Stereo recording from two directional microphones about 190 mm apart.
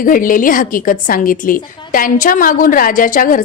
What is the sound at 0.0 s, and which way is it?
A woman's voice, 45° left (ahead or behind).